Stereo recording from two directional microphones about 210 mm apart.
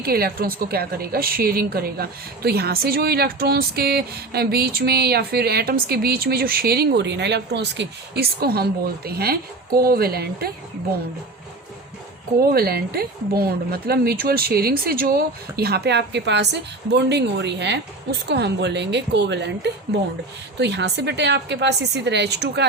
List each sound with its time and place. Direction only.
0.0 s a woman's voice: 45° right (ahead or behind)
12.4 s a woman's voice: 45° right (ahead or behind)